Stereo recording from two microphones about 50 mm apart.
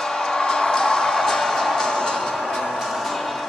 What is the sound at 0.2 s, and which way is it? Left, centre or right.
Music, centre.